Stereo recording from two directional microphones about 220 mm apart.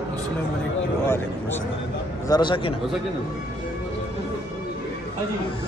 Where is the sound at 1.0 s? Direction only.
10° left (ahead or behind).